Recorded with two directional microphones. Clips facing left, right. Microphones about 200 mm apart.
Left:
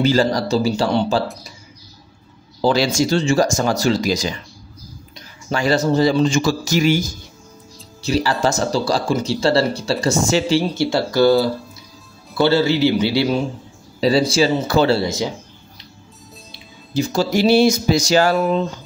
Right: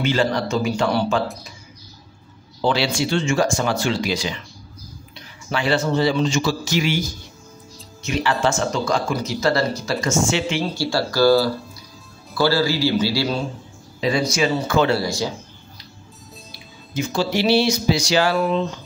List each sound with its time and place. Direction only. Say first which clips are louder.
0.0 s speech: left 4 dB; 40° left (ahead or behind)
2.6 s speech: left 4 dB; 40° left (ahead or behind)
10.8 s a man's voice: right 1 dB; 20° left (ahead or behind)
14.0 s a man's voice: left 5 dB; 30° left (ahead or behind)
16.5 s speech: left 5 dB; 35° left (ahead or behind)